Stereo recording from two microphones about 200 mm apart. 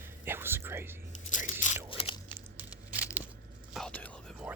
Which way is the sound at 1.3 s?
40° left (ahead or behind).